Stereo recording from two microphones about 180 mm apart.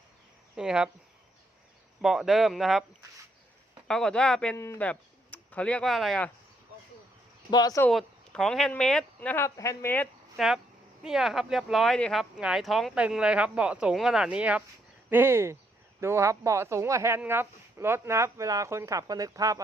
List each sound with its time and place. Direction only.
0.5 s speech: 5° right (ahead or behind)
2.0 s speech: centre (ahead or behind)
3.8 s speech: 5° left (ahead or behind)
7.5 s speech: 20° left (ahead or behind)
7.9 s speech: 5° left (ahead or behind)
10.3 s speech: 5° right (ahead or behind); by 19.6 s 20° right (ahead or behind)